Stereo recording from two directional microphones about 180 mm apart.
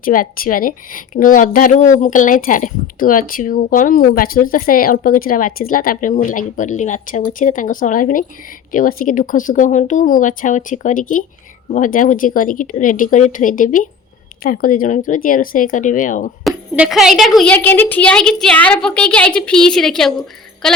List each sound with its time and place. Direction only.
0.0 s a woman's voice: 50° left (ahead or behind)
16.4 s a woman's voice: 5° right (ahead or behind)